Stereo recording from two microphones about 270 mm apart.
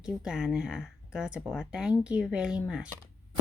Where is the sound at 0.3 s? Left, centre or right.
Centre.